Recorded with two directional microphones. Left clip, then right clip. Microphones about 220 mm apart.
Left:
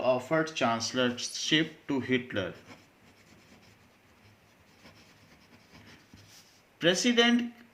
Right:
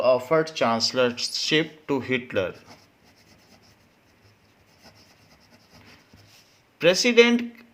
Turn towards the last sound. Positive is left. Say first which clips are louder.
# right 8 dB
turn(degrees=-40)  # may be behind; listen again after turning